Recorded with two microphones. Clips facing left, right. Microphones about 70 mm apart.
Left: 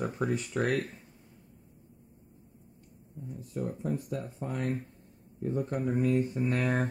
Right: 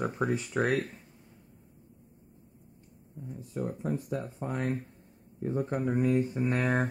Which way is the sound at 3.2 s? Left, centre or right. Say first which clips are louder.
Right 1 dB; right.